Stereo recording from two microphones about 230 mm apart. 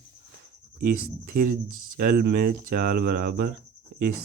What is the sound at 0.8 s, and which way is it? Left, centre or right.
Speech, right.